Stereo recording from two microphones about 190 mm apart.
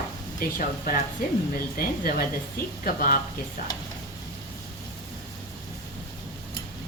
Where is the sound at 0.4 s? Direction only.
50° left (ahead or behind).